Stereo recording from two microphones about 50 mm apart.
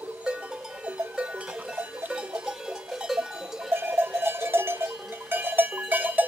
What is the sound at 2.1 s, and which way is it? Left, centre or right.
Goat, centre.